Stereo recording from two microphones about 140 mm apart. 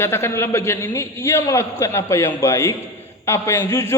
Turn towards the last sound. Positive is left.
turn(degrees=20)  # may be behind; listen again after turning